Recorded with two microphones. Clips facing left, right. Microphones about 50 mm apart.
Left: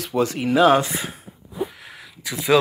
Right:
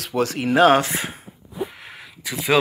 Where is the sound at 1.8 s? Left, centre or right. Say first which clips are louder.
Right 1 dB; centre.